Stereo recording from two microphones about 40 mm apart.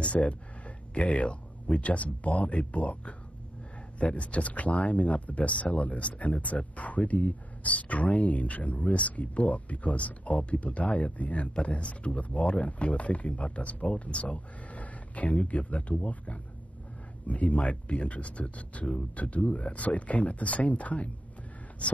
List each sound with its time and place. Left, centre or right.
0.0 s speech: left